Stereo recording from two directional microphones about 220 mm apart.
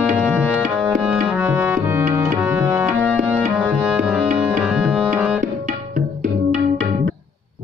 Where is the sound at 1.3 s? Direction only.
10° right (ahead or behind).